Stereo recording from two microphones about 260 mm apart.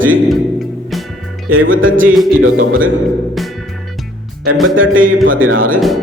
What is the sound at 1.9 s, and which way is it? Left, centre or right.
Music, right.